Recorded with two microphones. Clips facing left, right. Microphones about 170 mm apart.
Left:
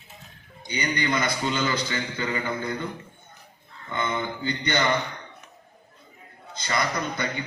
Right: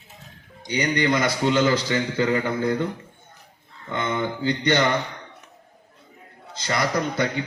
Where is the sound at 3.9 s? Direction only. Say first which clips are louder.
Right 3 dB; 80° right.